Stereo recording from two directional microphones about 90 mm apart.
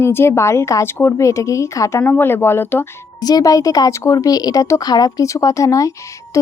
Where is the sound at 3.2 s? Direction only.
45° left (ahead or behind).